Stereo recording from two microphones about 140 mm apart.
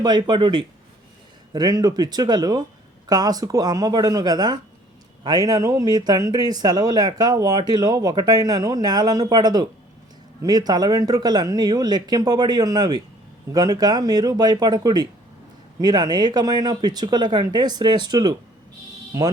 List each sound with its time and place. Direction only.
0.0 s speech: 30° right (ahead or behind)